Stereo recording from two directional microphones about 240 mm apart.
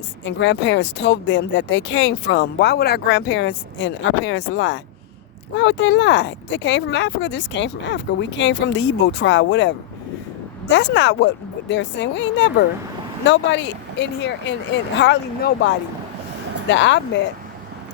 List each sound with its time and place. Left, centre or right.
0.3 s speech: left